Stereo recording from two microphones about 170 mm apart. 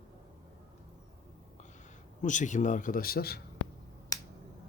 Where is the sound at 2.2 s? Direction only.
45° left (ahead or behind); by 3.4 s 65° left (ahead or behind).